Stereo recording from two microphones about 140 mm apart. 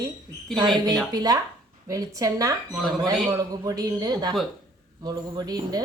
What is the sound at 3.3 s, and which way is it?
Speech, 25° right (ahead or behind).